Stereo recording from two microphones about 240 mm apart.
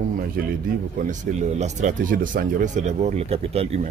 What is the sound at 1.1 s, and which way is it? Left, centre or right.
Speech, right.